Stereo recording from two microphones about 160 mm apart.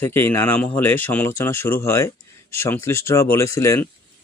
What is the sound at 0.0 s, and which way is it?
Speech, 15° left (ahead or behind).